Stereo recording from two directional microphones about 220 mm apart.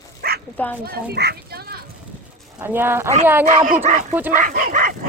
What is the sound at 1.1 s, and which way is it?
Children playing, 45° right (ahead or behind).